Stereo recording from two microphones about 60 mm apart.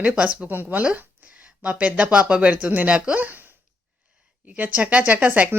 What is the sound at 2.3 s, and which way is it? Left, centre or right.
Speech, right.